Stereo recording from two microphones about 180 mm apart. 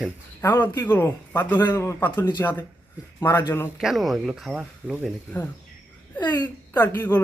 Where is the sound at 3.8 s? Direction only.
Centre (ahead or behind).